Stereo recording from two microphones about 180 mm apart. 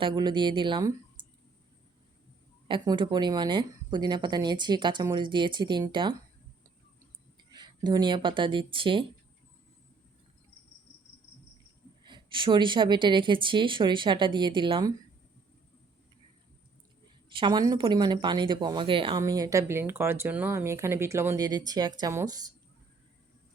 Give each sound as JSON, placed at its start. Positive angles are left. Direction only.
{"t": 0.0, "sound": "speech", "side_deg": -25}
{"t": 2.6, "sound": "speech", "side_deg": -25}
{"t": 7.5, "sound": "speech", "side_deg": -25}
{"t": 12.0, "sound": "speech", "side_deg": -25}
{"t": 17.2, "sound": "speech", "side_deg": -25}